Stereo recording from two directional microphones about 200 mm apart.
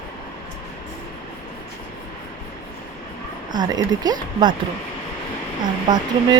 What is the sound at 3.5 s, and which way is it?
Speech, 20° right (ahead or behind).